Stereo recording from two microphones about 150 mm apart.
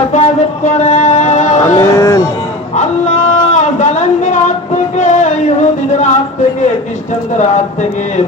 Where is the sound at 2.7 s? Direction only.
55° left (ahead or behind).